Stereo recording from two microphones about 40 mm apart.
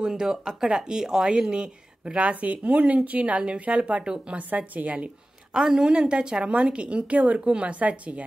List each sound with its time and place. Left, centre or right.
0.0 s speech: centre; by 5.1 s right
5.5 s a woman's voice: centre; by 8.1 s right